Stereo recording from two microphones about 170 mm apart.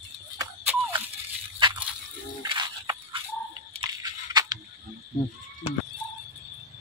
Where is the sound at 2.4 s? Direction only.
25° right (ahead or behind).